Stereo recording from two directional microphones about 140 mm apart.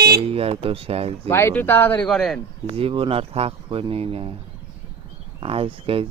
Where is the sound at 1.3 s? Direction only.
20° left (ahead or behind).